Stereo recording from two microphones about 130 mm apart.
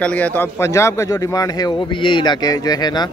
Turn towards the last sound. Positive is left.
turn(degrees=30)  # may be behind; listen again after turning